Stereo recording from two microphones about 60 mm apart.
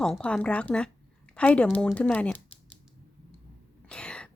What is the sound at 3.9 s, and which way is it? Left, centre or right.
Cough, centre.